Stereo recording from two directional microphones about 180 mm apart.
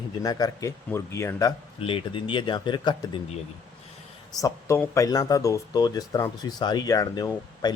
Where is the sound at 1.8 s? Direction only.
30° left (ahead or behind).